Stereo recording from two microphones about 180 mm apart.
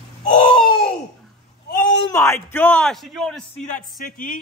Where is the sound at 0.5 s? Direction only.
30° left (ahead or behind).